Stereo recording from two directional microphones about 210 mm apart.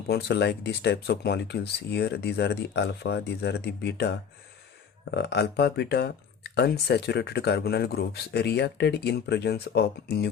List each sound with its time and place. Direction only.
0.1 s speech: 50° left (ahead or behind)
5.1 s speech: 50° left (ahead or behind)